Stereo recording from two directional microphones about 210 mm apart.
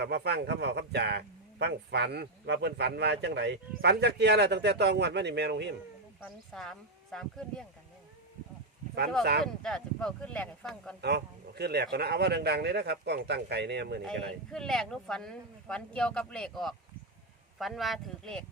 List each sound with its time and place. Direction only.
0.0 s a man's voice: 50° right (ahead or behind)
6.1 s speech: centre (ahead or behind)
9.4 s speech: 5° left (ahead or behind)
11.0 s a man's voice: 50° right (ahead or behind)
14.0 s speech: 5° left (ahead or behind)